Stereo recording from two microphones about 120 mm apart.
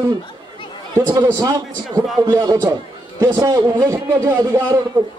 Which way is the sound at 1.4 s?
30° right (ahead or behind).